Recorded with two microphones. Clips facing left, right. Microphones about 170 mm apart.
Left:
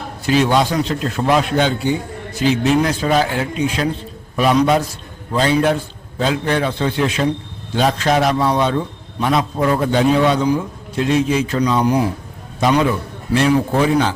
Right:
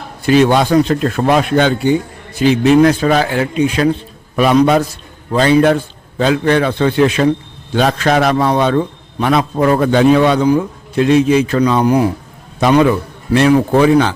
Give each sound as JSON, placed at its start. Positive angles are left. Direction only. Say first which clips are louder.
{"t": 0.3, "sound": "a man's voice", "louder": "right 5 dB", "side_deg": -60}